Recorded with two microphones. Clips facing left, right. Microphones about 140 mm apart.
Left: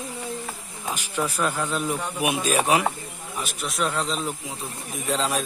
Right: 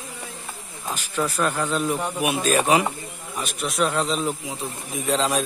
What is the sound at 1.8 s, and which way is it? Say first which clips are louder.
Speech: right 3 dB; 15° right (ahead or behind).